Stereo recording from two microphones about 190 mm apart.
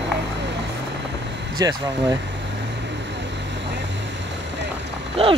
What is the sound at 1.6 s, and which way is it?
Speech, 20° right (ahead or behind).